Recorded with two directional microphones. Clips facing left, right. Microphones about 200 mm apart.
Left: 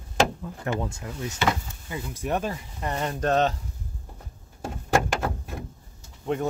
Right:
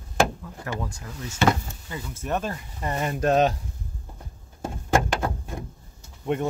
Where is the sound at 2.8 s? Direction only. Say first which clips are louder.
Right 2 dB; 5° right (ahead or behind).